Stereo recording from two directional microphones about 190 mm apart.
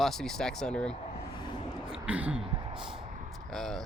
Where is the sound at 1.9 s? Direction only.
5° right (ahead or behind).